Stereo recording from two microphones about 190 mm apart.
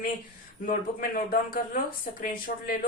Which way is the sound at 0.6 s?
45° left (ahead or behind).